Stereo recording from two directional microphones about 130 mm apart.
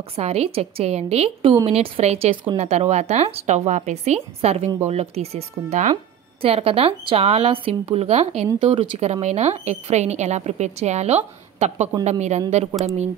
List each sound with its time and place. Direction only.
0.1 s a woman's voice: 55° right (ahead or behind)
6.4 s speech: 50° right (ahead or behind)
8.5 s speech: 45° right (ahead or behind)
8.9 s a woman's voice: 55° right (ahead or behind)